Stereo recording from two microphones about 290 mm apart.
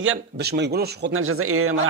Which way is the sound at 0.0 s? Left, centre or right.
Right.